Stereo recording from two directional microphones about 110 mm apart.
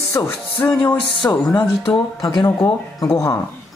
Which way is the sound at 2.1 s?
35° left (ahead or behind).